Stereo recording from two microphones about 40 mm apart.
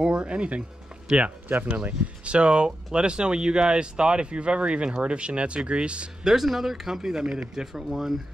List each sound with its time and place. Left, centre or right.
0.0 s speech: right
1.1 s speech: centre
1.9 s speech: right
6.2 s speech: centre
7.0 s speech: centre